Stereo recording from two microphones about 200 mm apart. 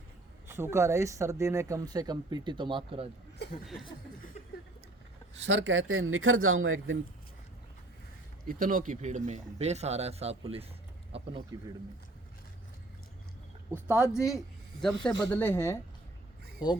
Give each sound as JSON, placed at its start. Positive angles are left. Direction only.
{"t": 0.4, "sound": "speech", "side_deg": -10}
{"t": 5.5, "sound": "speech", "side_deg": -65}
{"t": 8.4, "sound": "speech", "side_deg": -45}
{"t": 11.1, "sound": "a sound", "side_deg": -25}
{"t": 13.7, "sound": "a man's voice", "side_deg": -10}
{"t": 15.3, "sound": "speech", "side_deg": 10}